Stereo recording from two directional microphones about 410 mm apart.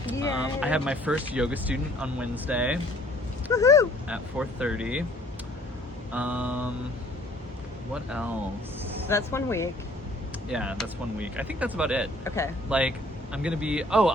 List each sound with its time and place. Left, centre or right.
0.6 s speech: centre
3.5 s speech: centre
4.1 s speech: centre
6.1 s speech: centre
7.9 s speech: centre